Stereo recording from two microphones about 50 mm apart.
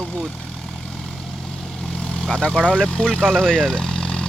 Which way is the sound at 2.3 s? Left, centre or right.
Centre.